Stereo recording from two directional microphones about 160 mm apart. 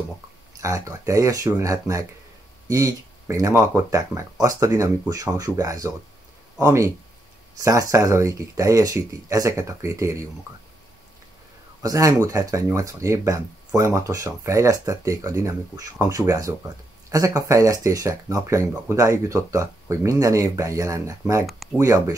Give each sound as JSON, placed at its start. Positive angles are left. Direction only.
{"t": 0.6, "sound": "speech", "side_deg": -20}
{"t": 11.8, "sound": "speech", "side_deg": -20}